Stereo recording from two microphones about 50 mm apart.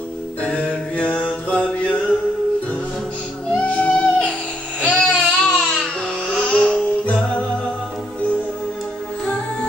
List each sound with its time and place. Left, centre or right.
0.4 s mantra: left
3.5 s music: left
4.8 s a sound: left
6.3 s music: left